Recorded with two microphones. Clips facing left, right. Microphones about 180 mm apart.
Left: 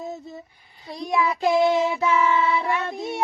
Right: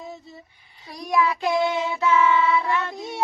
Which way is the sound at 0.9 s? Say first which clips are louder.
Right 1 dB; 25° left (ahead or behind).